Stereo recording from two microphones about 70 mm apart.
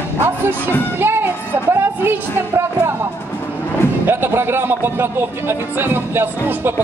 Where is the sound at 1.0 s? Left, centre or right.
Right.